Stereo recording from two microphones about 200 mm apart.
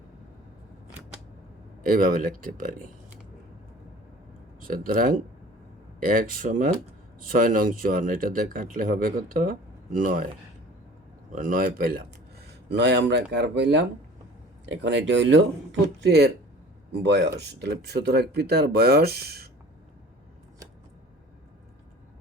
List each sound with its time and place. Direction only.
1.8 s speech: 40° right (ahead or behind)
4.6 s speech: 45° right (ahead or behind)
11.3 s speech: 40° right (ahead or behind)